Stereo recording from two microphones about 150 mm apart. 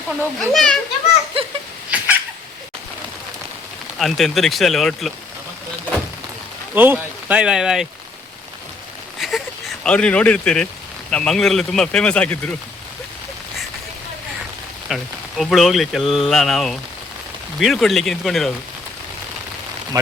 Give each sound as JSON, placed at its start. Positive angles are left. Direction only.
{"t": 0.2, "sound": "speech", "side_deg": 5}
{"t": 1.4, "sound": "a sound", "side_deg": -40}
{"t": 1.9, "sound": "cat", "side_deg": -10}
{"t": 3.9, "sound": "speech", "side_deg": 0}
{"t": 6.7, "sound": "speech", "side_deg": -15}
{"t": 9.1, "sound": "a sound", "side_deg": 0}
{"t": 9.8, "sound": "speech", "side_deg": 5}
{"t": 14.8, "sound": "speech", "side_deg": 0}